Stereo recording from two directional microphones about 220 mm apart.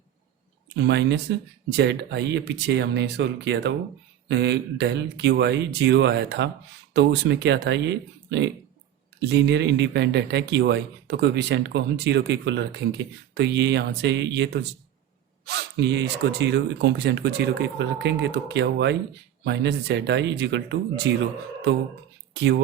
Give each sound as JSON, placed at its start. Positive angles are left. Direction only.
{"t": 0.9, "sound": "speech", "side_deg": -55}